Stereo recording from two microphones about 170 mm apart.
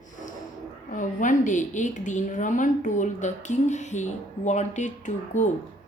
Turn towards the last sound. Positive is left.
turn(degrees=45)  # may be behind; listen again after turning